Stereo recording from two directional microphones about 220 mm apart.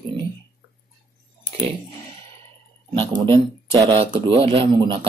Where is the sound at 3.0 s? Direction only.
20° right (ahead or behind).